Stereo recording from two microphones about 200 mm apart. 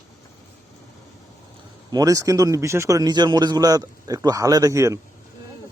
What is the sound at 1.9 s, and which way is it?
A man's voice, 20° right (ahead or behind).